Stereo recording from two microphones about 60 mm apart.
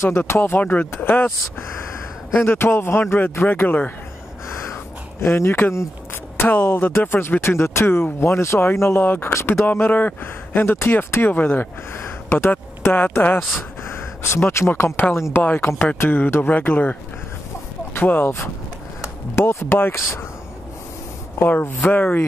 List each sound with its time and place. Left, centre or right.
0.2 s speech: left
2.4 s speech: left
5.2 s speech: left
13.6 s a sound: left
15.1 s speech: left
15.4 s a man's voice: left
17.9 s speech: left
21.4 s speech: left